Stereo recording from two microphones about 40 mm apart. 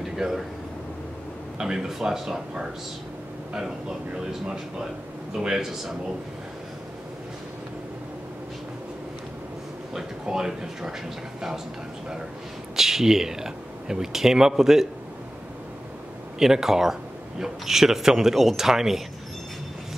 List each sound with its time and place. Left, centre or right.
0.1 s a sound: centre
1.6 s speech: centre
4.3 s speech: centre
9.9 s speech: centre
12.7 s speech: centre
16.3 s speech: centre